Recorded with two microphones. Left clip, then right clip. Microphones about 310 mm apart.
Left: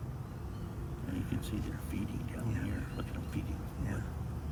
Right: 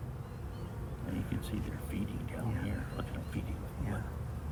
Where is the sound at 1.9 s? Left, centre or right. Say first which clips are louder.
Even; right.